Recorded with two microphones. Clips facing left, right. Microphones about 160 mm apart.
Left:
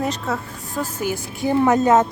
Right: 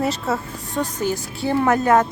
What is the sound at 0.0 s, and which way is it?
A woman's voice, 5° right (ahead or behind).